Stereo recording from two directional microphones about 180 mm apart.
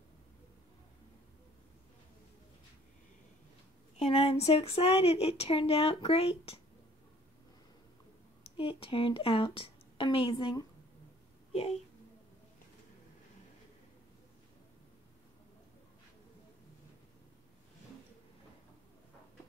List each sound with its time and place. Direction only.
4.0 s speech: 35° left (ahead or behind)
8.5 s a woman's voice: 30° left (ahead or behind)